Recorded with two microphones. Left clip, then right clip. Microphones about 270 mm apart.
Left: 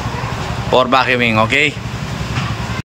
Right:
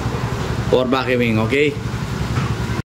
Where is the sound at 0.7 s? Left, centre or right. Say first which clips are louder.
Left 5 dB; centre.